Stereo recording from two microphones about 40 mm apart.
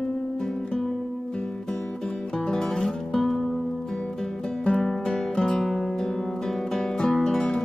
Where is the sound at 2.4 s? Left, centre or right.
Centre.